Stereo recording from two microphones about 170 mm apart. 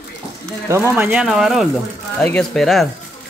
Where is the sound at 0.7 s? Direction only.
15° right (ahead or behind); by 2.9 s centre (ahead or behind).